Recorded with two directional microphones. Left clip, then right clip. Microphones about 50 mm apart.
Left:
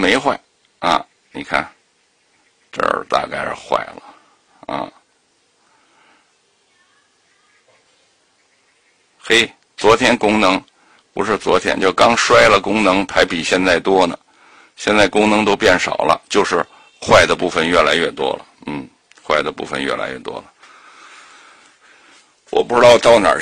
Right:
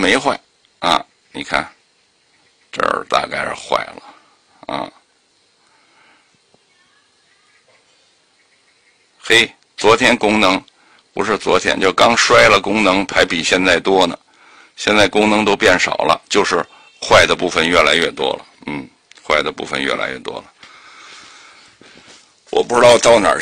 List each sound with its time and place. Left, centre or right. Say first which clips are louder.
0.0 s a sound: even; centre
2.8 s speech: even; centre
3.4 s speech: right 1 dB; left
4.6 s a sound: even; centre
9.2 s speech: right 2 dB; left
17.6 s speech: right 1 dB; centre
18.1 s a sound: right 1 dB; left
19.2 s speech: right 1 dB; centre
19.9 s speech: right 2 dB; centre
20.2 s speech: right 1 dB; left
20.6 s sniff: right 2 dB; left
21.1 s a sound: right 2 dB; centre
21.8 s dog: right 4 dB; centre
22.5 s speech: even; centre